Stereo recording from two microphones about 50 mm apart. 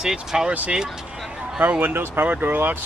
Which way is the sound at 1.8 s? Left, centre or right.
Right.